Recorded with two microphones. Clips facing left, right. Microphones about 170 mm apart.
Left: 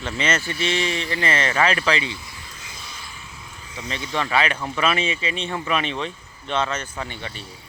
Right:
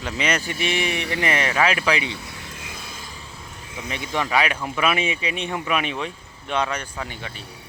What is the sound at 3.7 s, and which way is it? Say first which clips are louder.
Speech: even; 15° right (ahead or behind).